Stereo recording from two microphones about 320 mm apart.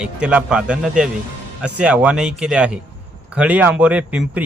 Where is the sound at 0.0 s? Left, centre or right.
Centre.